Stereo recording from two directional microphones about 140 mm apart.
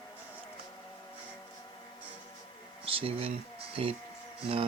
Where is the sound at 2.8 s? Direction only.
40° right (ahead or behind).